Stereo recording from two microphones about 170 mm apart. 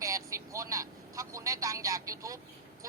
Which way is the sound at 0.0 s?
20° right (ahead or behind).